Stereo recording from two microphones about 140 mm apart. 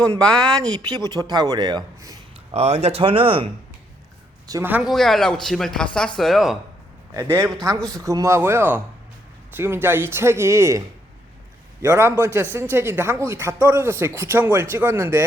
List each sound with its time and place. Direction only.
0.2 s speech: 30° right (ahead or behind)
2.5 s speech: 50° right (ahead or behind)
4.6 s speech: 10° right (ahead or behind)
4.9 s speech: centre (ahead or behind)
7.1 s speech: 20° right (ahead or behind)